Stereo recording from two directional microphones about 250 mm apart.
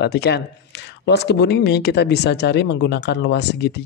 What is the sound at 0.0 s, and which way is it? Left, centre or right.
Speech, left.